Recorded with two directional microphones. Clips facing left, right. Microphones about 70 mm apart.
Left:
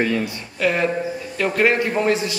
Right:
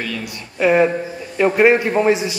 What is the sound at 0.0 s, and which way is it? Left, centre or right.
Speech, left.